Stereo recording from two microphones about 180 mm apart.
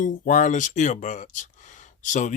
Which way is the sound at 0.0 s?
45° left (ahead or behind).